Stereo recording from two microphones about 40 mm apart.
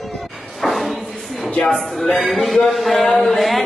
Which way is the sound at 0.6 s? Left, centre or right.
Centre.